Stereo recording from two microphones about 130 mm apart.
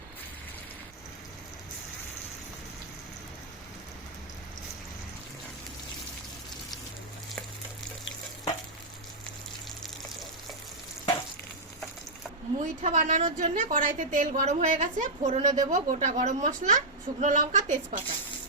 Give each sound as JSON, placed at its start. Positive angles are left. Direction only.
{"t": 12.5, "sound": "a woman's voice", "side_deg": -60}
{"t": 15.7, "sound": "a woman's voice", "side_deg": -70}